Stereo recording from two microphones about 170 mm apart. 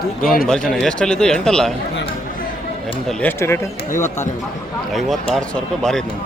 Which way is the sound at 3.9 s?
45° left (ahead or behind).